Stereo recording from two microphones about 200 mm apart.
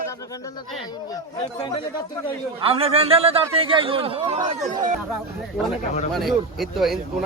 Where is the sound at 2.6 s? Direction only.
30° right (ahead or behind).